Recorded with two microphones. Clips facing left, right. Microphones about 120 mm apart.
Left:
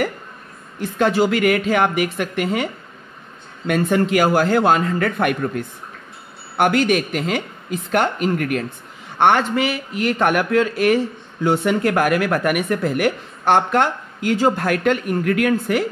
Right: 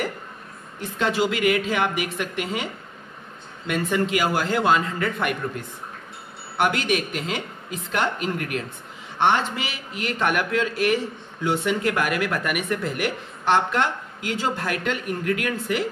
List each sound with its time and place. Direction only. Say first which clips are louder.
0.9 s speech: left 6 dB; 50° left (ahead or behind)
6.5 s speech: left 6 dB; 50° left (ahead or behind)